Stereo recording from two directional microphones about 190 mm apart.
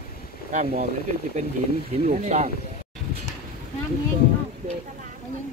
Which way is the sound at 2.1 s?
40° right (ahead or behind).